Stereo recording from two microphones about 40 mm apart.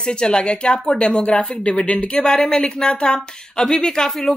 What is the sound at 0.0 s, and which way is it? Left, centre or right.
Speech, left.